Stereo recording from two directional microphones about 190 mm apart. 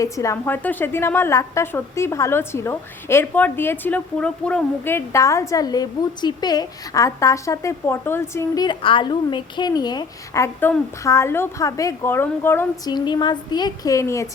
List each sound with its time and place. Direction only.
0.0 s a woman's voice: 15° left (ahead or behind)
12.9 s a woman's voice: 25° left (ahead or behind)